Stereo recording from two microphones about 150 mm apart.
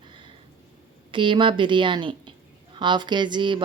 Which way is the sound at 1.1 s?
35° right (ahead or behind).